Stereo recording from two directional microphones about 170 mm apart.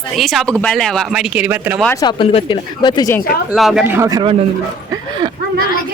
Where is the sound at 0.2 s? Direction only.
Centre (ahead or behind).